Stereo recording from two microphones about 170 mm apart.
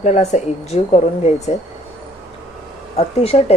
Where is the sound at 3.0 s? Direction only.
35° left (ahead or behind).